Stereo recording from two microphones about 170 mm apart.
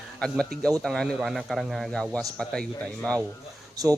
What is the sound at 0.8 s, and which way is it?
A man's voice, centre (ahead or behind).